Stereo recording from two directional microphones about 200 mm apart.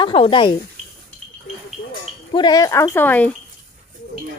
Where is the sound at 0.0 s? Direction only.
25° left (ahead or behind).